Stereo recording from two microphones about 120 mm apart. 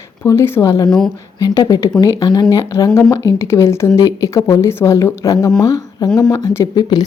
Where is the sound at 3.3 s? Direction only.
20° left (ahead or behind).